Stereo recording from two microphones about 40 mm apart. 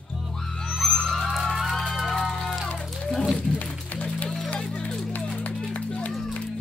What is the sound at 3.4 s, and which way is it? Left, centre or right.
Music, left.